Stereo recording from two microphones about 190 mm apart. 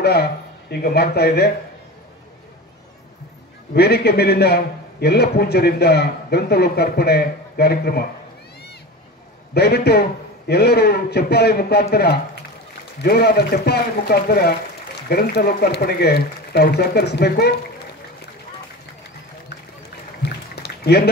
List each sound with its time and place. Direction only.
0.0 s a man's voice: 55° left (ahead or behind)
3.7 s a man's voice: 60° left (ahead or behind)
9.5 s a man's voice: 55° left (ahead or behind)
20.2 s a sound: 60° left (ahead or behind)